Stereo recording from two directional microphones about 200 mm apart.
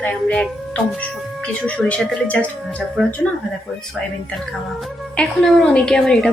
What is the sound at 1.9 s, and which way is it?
Speech, 5° left (ahead or behind).